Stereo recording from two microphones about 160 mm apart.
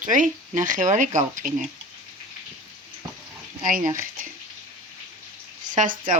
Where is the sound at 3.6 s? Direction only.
55° right (ahead or behind).